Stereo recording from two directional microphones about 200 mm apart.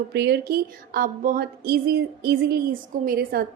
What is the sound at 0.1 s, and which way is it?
A woman's voice, 55° right (ahead or behind).